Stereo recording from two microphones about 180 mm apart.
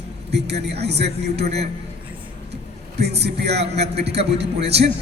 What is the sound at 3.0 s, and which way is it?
A man's voice, 65° right (ahead or behind).